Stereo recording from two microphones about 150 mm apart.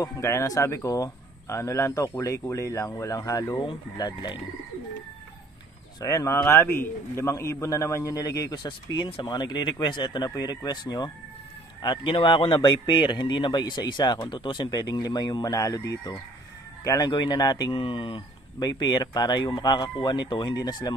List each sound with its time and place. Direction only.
0.0 s a man's voice: 20° left (ahead or behind)
5.9 s a man's voice: 20° left (ahead or behind)